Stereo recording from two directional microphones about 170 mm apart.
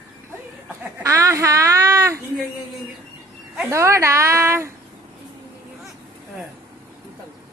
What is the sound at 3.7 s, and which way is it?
Speech, 15° right (ahead or behind).